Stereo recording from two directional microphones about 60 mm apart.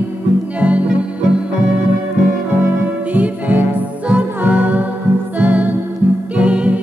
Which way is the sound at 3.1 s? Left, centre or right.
Right.